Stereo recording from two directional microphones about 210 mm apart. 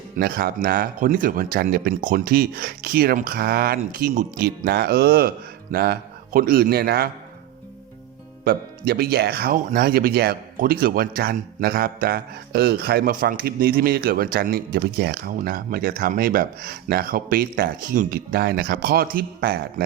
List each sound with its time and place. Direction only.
0.2 s speech: 50° right (ahead or behind)
8.4 s speech: 45° right (ahead or behind)